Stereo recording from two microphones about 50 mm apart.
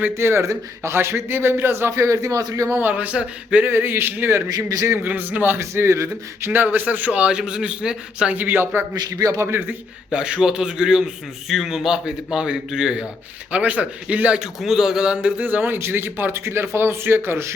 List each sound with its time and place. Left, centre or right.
0.1 s a man's voice: right
2.0 s a man's voice: right
2.7 s a man's voice: right
3.7 s a man's voice: right
5.0 s a man's voice: right
5.5 s a man's voice: right
6.4 s a man's voice: right; by 8.4 s centre
8.4 s a man's voice: right
10.1 s a man's voice: centre
11.4 s a man's voice: centre
13.5 s a man's voice: right
14.3 s a man's voice: centre
15.0 s a man's voice: right
15.4 s a man's voice: right